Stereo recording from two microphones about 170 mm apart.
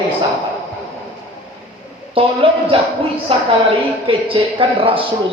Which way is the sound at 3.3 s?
30° right (ahead or behind).